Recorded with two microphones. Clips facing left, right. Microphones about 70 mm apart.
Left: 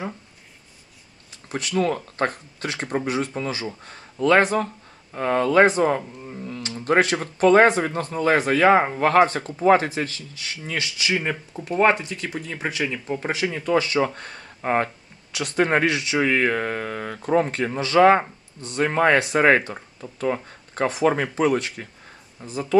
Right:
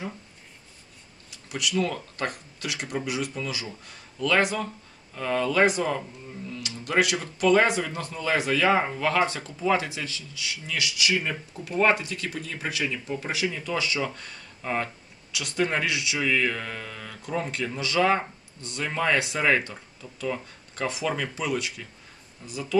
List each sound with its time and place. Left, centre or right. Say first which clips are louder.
1.5 s speech: left 4 dB; left